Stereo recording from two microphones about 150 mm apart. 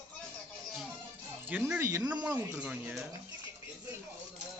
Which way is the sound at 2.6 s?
10° right (ahead or behind).